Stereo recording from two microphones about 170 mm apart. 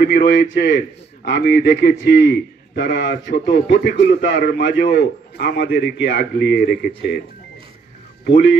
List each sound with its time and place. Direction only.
0.1 s a man's voice: 75° left (ahead or behind)